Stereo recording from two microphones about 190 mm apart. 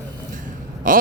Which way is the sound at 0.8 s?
45° right (ahead or behind).